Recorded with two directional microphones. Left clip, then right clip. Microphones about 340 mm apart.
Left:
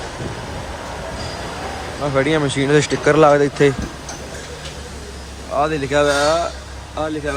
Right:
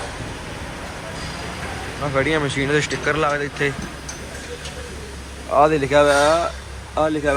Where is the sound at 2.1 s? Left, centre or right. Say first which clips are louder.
Left 2 dB; centre.